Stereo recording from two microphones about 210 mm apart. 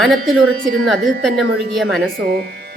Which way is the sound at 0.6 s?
40° right (ahead or behind).